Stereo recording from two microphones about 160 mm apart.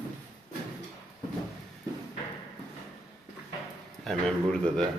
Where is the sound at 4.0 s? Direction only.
5° left (ahead or behind).